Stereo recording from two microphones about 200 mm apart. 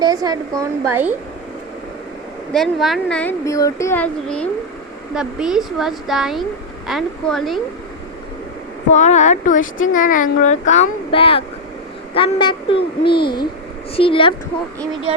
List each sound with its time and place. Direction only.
0.0 s speech: 20° right (ahead or behind)
2.5 s speech: centre (ahead or behind)
8.9 s a child's voice: 35° left (ahead or behind)